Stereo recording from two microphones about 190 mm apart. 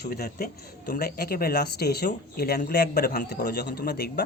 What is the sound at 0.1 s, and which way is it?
Speech, 55° left (ahead or behind).